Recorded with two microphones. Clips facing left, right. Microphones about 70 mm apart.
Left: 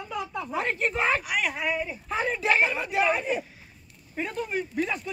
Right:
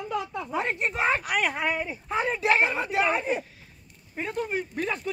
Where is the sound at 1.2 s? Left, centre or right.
Right.